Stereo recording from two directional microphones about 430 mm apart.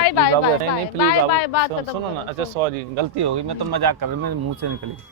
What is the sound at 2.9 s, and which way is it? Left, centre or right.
Speech, right.